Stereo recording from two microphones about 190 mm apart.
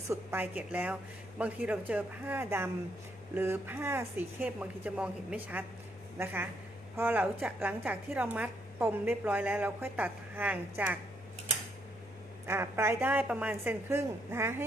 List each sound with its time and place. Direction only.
0.1 s a woman's voice: 10° right (ahead or behind)
12.5 s a woman's voice: 10° right (ahead or behind)